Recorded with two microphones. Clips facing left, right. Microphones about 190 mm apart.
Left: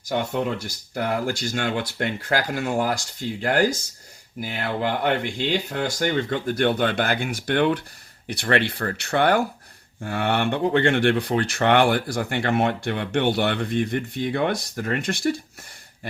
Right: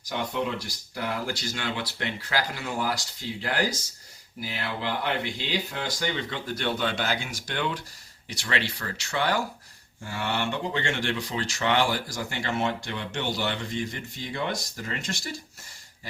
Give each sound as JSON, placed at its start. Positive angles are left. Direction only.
{"t": 0.1, "sound": "speech", "side_deg": 50}